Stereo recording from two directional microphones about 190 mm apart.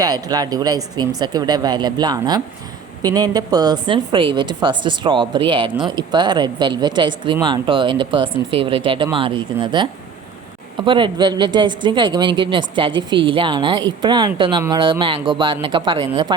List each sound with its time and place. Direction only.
0.0 s speech: 20° right (ahead or behind)